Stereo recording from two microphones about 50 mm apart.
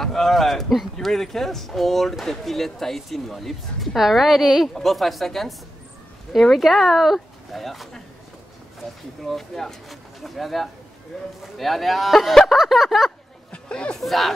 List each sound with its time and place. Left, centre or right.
0.0 s speech: centre
6.5 s speech: centre
9.2 s speech: centre
13.5 s chatter: left
14.0 s speech: centre